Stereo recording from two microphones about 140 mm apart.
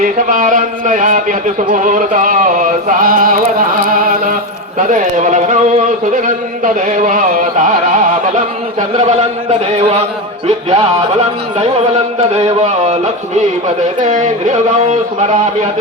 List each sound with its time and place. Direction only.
0.0 s chant: 70° right (ahead or behind); by 3.4 s 90° right
3.9 s music: 90° right
4.9 s speech: 65° right (ahead or behind)
6.1 s chant: 70° right (ahead or behind)
9.7 s speech: 50° right (ahead or behind)
12.4 s speech: 50° right (ahead or behind)
14.0 s speech: 65° right (ahead or behind)